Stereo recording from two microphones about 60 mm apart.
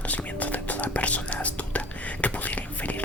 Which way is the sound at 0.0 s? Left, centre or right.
Left.